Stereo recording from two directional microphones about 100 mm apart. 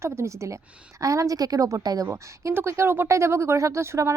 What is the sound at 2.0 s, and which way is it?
Speech, 20° right (ahead or behind).